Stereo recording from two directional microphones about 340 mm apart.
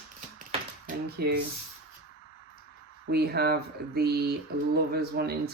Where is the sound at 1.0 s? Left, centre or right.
Right.